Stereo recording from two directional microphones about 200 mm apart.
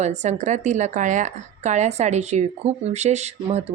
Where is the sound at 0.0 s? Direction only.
35° right (ahead or behind).